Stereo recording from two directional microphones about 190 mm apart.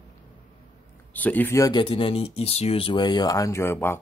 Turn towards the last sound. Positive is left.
turn(degrees=15)  # may be behind; listen again after turning